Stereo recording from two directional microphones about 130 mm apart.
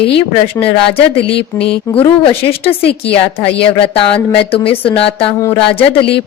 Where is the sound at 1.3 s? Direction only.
45° left (ahead or behind).